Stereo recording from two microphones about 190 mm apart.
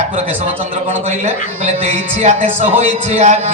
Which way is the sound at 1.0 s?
35° right (ahead or behind).